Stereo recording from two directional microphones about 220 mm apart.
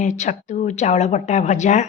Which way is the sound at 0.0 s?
35° left (ahead or behind).